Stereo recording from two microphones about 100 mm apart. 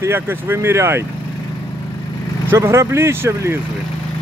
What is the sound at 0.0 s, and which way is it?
Speech, 25° right (ahead or behind).